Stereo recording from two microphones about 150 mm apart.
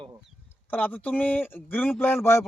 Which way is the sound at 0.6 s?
10° left (ahead or behind).